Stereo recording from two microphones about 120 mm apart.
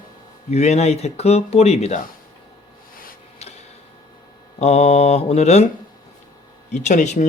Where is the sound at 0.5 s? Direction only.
65° left (ahead or behind).